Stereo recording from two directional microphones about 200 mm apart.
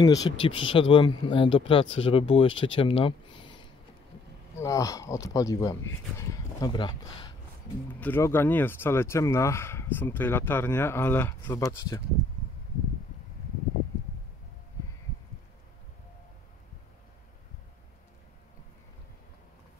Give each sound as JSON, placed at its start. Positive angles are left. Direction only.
{"t": 0.0, "sound": "speech", "side_deg": 20}
{"t": 7.9, "sound": "speech", "side_deg": 10}